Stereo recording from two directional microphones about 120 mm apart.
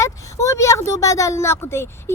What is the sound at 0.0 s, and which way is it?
A woman's voice, 25° left (ahead or behind).